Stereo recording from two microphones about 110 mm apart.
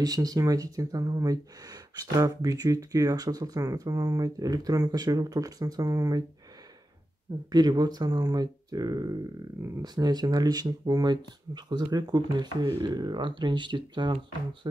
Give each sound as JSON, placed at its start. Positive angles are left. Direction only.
{"t": 0.0, "sound": "speech", "side_deg": -35}
{"t": 7.5, "sound": "speech", "side_deg": -40}